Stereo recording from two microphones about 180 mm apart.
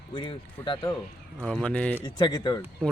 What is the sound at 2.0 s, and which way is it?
Speech, 25° left (ahead or behind).